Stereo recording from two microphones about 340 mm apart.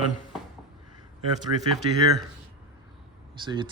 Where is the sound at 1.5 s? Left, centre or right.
Right.